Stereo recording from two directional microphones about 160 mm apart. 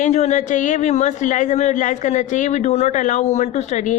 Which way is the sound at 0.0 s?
45° left (ahead or behind).